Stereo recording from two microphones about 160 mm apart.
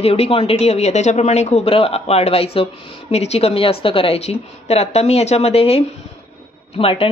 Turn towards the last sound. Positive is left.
turn(degrees=35)  # may be behind; listen again after turning